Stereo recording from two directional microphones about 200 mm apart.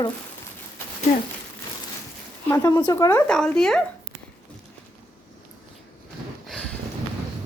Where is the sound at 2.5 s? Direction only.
15° left (ahead or behind).